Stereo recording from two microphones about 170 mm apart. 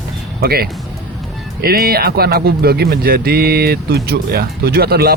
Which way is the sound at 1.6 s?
65° right (ahead or behind).